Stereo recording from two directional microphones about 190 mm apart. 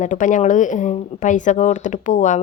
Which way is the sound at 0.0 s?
40° left (ahead or behind).